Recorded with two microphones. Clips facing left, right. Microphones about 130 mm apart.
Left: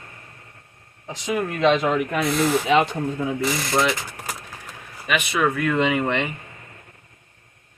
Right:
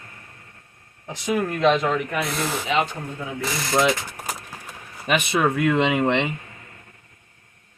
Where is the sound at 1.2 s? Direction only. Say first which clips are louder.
Even; centre (ahead or behind).